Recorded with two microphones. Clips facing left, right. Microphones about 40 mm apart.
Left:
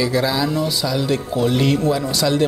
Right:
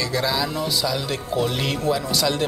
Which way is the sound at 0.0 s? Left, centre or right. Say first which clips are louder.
Left 4 dB; centre.